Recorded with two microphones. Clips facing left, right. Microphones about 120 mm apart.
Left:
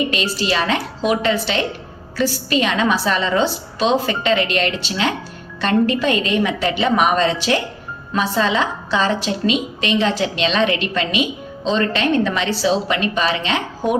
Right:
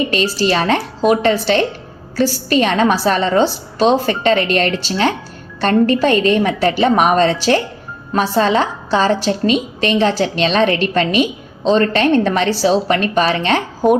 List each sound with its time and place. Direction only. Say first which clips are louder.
0.1 s a woman's voice: right 5 dB; 40° right (ahead or behind)